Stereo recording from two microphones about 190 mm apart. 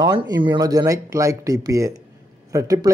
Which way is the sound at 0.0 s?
20° right (ahead or behind).